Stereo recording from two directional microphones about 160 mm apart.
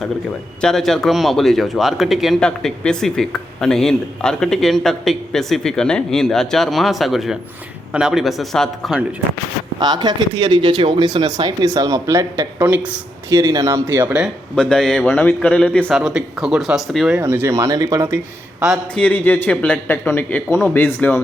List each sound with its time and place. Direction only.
0.6 s speech: 5° left (ahead or behind)
9.8 s speech: 25° right (ahead or behind); by 13.0 s 10° right (ahead or behind)
13.3 s speech: 20° right (ahead or behind)
14.5 s a man's voice: 5° left (ahead or behind)
17.2 s speech: 15° right (ahead or behind)
18.9 s a man's voice: 10° left (ahead or behind)